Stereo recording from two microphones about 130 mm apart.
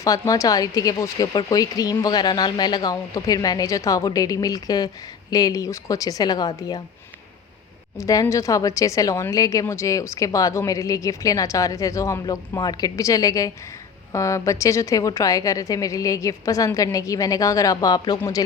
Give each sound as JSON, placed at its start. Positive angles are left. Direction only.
{"t": 0.0, "sound": "a woman's voice", "side_deg": 25}
{"t": 7.9, "sound": "a woman's voice", "side_deg": 25}